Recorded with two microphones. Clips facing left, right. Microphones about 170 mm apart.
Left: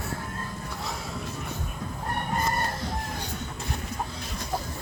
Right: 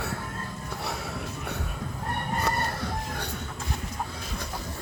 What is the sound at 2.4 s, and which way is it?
Crowing, 65° right (ahead or behind).